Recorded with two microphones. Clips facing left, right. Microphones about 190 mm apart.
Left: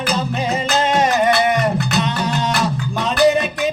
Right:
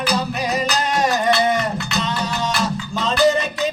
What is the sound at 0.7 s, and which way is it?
Music, 20° left (ahead or behind).